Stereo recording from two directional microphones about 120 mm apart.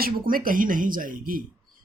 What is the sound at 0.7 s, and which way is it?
Speech, 90° right.